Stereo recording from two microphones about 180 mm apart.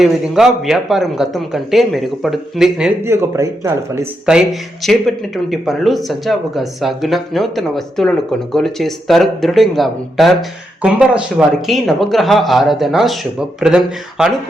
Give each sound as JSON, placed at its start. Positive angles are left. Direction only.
{"t": 0.0, "sound": "speech", "side_deg": 0}
{"t": 3.0, "sound": "speech", "side_deg": -15}
{"t": 4.3, "sound": "speech", "side_deg": 0}